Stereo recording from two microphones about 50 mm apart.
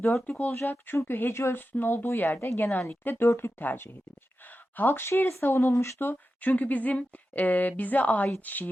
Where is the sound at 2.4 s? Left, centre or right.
Left.